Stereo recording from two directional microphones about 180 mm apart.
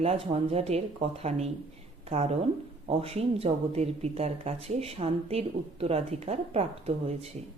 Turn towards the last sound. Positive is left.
turn(degrees=-35)  # may be behind; listen again after turning